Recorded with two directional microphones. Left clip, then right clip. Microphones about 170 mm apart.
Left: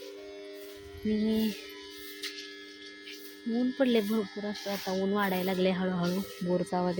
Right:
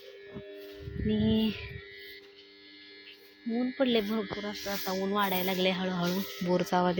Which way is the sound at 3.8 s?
15° left (ahead or behind).